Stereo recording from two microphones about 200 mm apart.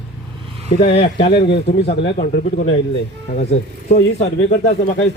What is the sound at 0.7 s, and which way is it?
A man's voice, 30° left (ahead or behind).